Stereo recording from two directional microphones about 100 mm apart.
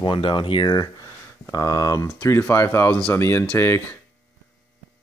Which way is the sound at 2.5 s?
25° left (ahead or behind).